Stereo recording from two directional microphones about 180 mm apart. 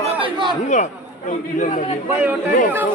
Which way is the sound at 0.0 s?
30° right (ahead or behind).